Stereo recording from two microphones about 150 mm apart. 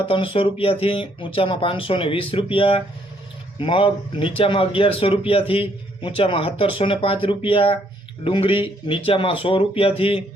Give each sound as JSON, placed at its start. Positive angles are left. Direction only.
{"t": 0.0, "sound": "speech", "side_deg": 35}